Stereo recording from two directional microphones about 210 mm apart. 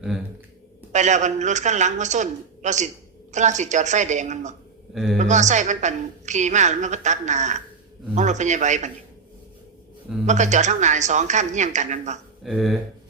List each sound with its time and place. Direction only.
0.9 s a woman's voice: 35° right (ahead or behind)
10.2 s a woman's voice: 35° right (ahead or behind)
12.4 s speech: centre (ahead or behind)